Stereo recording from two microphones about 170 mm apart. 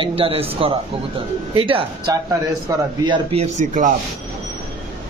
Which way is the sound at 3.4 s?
45° right (ahead or behind).